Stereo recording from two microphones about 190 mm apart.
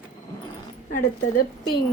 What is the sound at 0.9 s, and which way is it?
Speech, 45° left (ahead or behind).